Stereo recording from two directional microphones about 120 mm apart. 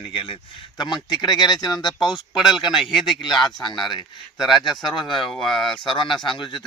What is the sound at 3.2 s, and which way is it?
Speech, 40° left (ahead or behind).